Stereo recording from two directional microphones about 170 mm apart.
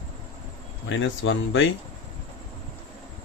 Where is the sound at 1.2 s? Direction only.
90° left.